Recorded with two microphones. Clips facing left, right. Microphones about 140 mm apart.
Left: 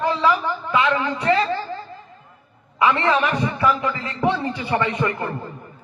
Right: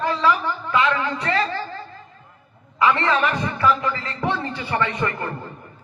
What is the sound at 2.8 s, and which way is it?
A man's voice, 15° left (ahead or behind).